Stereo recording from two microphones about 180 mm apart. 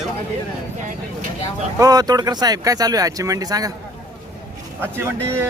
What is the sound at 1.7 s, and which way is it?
Speech, 20° right (ahead or behind).